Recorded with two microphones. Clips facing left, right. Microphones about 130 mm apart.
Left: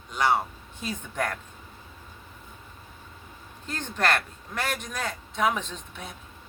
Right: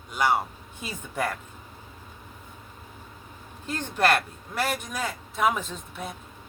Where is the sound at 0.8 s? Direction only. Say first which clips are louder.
Even; 5° right (ahead or behind).